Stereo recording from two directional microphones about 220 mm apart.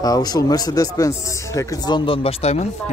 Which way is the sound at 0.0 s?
15° left (ahead or behind).